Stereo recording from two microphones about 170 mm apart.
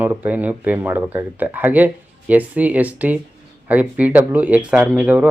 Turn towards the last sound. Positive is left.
turn(degrees=-10)  # may be behind; listen again after turning